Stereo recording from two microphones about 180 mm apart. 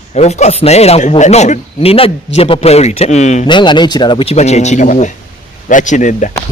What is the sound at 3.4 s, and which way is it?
Speech, 25° left (ahead or behind).